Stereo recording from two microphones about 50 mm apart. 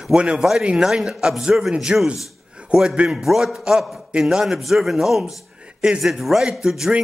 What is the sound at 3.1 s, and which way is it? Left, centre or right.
A man's voice, centre.